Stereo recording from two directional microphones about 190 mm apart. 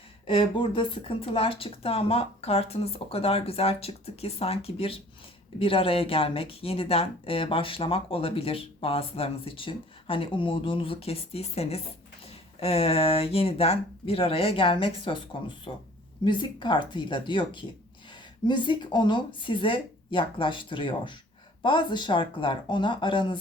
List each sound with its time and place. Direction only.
0.3 s speech: 25° left (ahead or behind)